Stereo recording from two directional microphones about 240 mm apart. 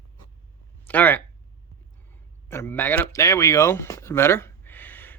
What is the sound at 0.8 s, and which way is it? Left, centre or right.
Speech, centre.